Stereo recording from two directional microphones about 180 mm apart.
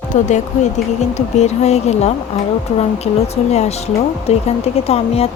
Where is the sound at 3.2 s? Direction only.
35° left (ahead or behind).